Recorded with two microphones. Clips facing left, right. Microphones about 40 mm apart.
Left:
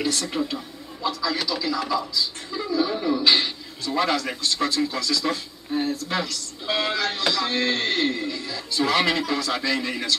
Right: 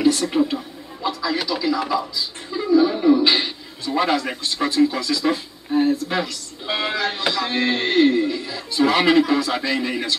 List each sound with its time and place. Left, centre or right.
0.0 s speech: centre